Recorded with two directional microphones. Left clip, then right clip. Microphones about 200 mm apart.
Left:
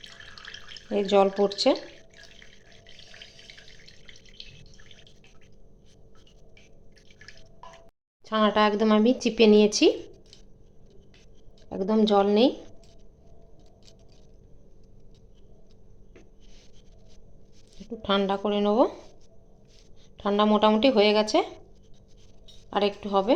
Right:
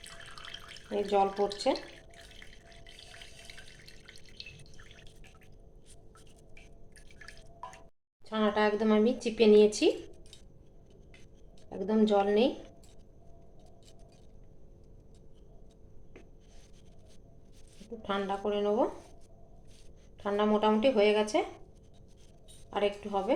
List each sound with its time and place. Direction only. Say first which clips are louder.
0.0 s drip: left 3 dB; 10° right (ahead or behind)
0.9 s speech: left 7 dB; 50° left (ahead or behind)
2.6 s drip: left 2 dB; 10° right (ahead or behind)
8.2 s speech: left 6 dB; 40° left (ahead or behind)
11.7 s speech: left 5 dB; 35° left (ahead or behind)
18.0 s speech: left 7 dB; 45° left (ahead or behind)
20.2 s speech: left 6 dB; 45° left (ahead or behind)
22.7 s speech: left 6 dB; 45° left (ahead or behind)